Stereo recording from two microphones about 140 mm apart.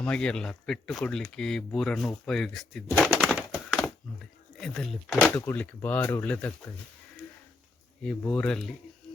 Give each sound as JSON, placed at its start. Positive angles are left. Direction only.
{"t": 0.0, "sound": "speech", "side_deg": 5}
{"t": 5.3, "sound": "speech", "side_deg": 15}
{"t": 8.3, "sound": "speech", "side_deg": 5}